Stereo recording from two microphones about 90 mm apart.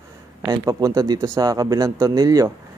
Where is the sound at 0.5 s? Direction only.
45° right (ahead or behind).